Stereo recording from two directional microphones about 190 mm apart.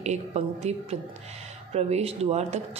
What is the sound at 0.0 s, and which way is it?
A woman's voice, 35° right (ahead or behind).